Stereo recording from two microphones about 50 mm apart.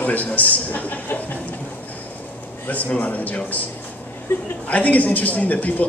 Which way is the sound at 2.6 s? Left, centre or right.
Left.